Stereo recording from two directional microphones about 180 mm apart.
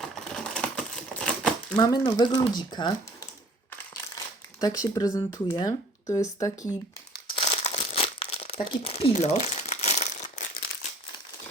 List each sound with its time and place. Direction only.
0.0 s crumpling: 5° left (ahead or behind)
1.7 s speech: 20° left (ahead or behind)
4.6 s speech: 20° left (ahead or behind)
7.3 s crumpling: 30° left (ahead or behind)